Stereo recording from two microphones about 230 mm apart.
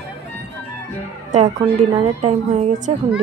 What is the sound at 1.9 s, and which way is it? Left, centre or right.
A woman's voice, right.